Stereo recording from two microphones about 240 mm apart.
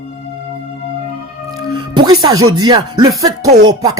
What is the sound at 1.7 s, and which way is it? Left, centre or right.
Music, centre.